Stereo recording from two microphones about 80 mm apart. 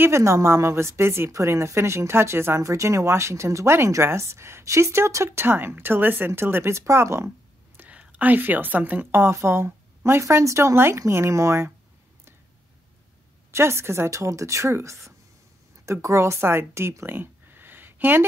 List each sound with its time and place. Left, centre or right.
0.0 s a woman's voice: right
7.2 s a woman's voice: right
13.5 s a woman's voice: right